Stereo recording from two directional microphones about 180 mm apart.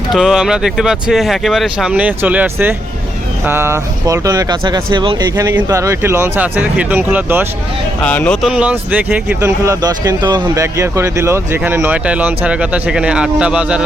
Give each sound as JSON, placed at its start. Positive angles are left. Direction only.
{"t": 0.1, "sound": "speech", "side_deg": 0}
{"t": 8.0, "sound": "speech", "side_deg": 5}